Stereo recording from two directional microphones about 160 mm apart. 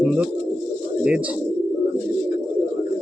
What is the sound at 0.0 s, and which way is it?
Bird, 5° right (ahead or behind).